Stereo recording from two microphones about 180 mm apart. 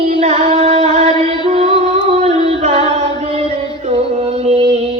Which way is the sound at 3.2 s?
35° right (ahead or behind).